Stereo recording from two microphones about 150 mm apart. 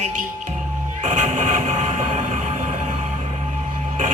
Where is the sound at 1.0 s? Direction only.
55° right (ahead or behind).